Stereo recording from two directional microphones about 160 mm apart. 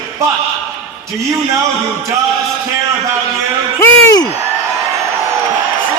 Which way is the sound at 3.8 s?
20° left (ahead or behind).